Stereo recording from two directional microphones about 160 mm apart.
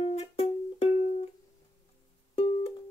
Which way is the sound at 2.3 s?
40° left (ahead or behind).